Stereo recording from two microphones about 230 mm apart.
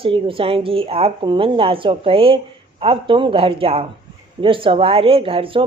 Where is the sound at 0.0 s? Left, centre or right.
Right.